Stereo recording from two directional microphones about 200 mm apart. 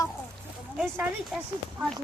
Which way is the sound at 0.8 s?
5° right (ahead or behind).